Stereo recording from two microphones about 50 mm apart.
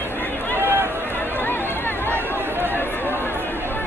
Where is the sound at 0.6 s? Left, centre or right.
Right.